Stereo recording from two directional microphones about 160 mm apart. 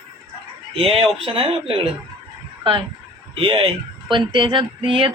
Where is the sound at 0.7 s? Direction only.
35° right (ahead or behind).